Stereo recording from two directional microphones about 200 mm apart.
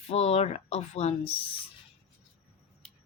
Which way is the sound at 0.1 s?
30° left (ahead or behind).